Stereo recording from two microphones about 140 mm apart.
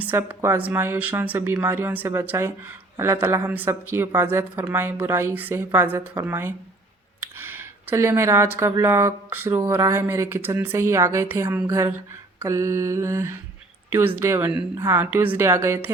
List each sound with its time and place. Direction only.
0.0 s a woman's voice: 15° right (ahead or behind)